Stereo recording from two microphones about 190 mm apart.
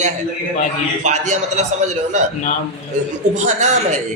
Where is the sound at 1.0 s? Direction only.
40° right (ahead or behind).